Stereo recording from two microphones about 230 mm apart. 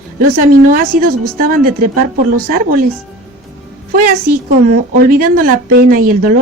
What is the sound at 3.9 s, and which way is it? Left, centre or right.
A woman's voice, right.